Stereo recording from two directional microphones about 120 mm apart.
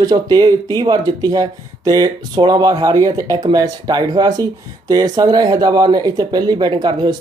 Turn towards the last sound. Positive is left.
turn(degrees=-35)  # may be behind; listen again after turning